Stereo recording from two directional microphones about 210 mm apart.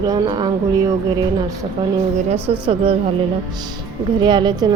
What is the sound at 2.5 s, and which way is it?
Speech, 30° right (ahead or behind).